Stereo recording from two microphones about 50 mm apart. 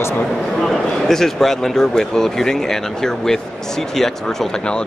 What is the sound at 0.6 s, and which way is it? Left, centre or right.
Speech, centre.